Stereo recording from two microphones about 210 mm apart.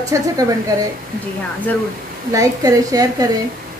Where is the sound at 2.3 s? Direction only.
15° right (ahead or behind).